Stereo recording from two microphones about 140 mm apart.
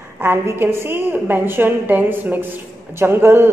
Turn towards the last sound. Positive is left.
turn(degrees=-15)  # may be behind; listen again after turning